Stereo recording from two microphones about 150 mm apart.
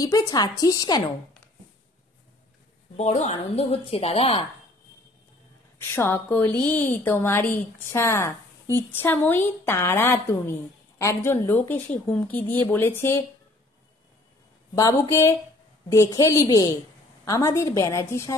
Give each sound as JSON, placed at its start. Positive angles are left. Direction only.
{"t": 0.0, "sound": "a woman's voice", "side_deg": 25}
{"t": 3.0, "sound": "speech", "side_deg": 50}
{"t": 5.8, "sound": "a woman's voice", "side_deg": 15}
{"t": 14.8, "sound": "a woman's voice", "side_deg": 20}